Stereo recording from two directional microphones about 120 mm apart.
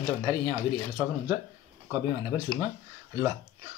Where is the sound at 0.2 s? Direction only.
40° right (ahead or behind).